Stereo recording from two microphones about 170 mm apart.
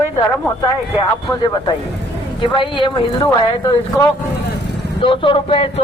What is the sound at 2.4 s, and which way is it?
Speech, 30° left (ahead or behind).